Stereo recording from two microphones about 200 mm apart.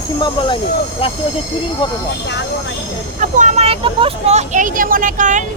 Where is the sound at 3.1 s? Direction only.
35° right (ahead or behind).